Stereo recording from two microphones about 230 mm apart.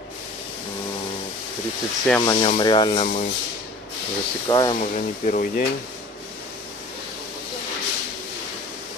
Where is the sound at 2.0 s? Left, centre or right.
Centre.